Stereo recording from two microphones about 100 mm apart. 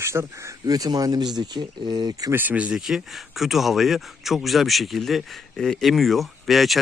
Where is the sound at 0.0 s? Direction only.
25° right (ahead or behind).